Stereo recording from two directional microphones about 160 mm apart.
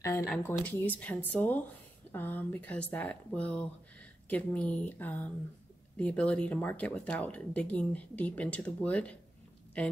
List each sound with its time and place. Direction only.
0.0 s speech: 20° left (ahead or behind)